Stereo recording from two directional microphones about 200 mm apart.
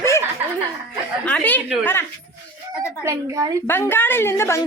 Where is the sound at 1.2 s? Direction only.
10° left (ahead or behind).